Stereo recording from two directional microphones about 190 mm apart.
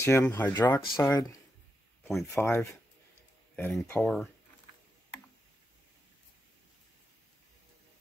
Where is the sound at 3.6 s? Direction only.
15° left (ahead or behind).